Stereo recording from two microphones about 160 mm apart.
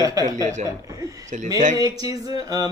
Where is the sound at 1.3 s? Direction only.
55° right (ahead or behind).